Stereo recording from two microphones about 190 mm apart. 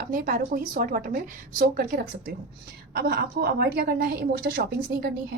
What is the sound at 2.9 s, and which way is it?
Speech, 60° right (ahead or behind).